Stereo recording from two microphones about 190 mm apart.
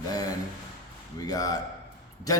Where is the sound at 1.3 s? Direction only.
20° left (ahead or behind).